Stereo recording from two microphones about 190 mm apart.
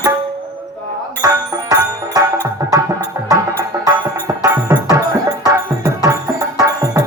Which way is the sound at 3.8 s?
15° right (ahead or behind).